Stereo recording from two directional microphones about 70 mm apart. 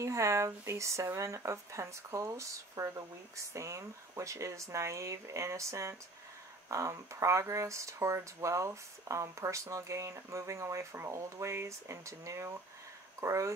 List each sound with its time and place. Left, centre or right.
0.0 s speech: right